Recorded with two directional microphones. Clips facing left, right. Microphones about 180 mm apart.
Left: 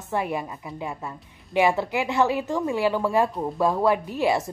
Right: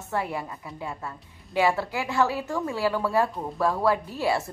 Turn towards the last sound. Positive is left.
turn(degrees=20)  # may be behind; listen again after turning